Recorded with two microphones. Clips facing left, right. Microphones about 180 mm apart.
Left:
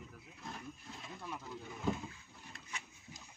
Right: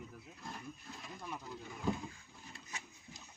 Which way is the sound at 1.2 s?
10° right (ahead or behind).